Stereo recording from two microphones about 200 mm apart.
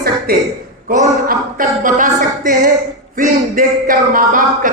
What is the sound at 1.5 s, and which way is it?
Speech, 40° right (ahead or behind).